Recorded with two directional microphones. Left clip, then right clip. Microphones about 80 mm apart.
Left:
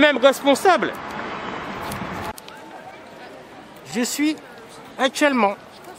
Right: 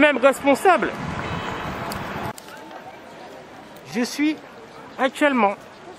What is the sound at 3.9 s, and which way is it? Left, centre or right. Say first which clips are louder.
Speech: left 1 dB; left.